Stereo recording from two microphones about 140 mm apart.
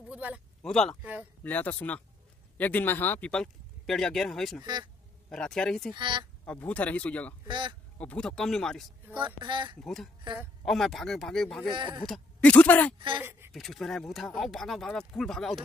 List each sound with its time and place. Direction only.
0.1 s a sound: 10° right (ahead or behind)
0.6 s speech: 5° left (ahead or behind)
5.9 s speech: 35° right (ahead or behind)
6.4 s speech: 10° left (ahead or behind)
7.4 s speech: 35° right (ahead or behind)
8.0 s speech: 10° left (ahead or behind)
9.2 s speech: 35° right (ahead or behind)
9.8 s speech: 5° left (ahead or behind)
11.7 s speech: 35° right (ahead or behind)
12.1 s speech: 10° left (ahead or behind)
13.2 s speech: 15° right (ahead or behind)
13.5 s speech: centre (ahead or behind)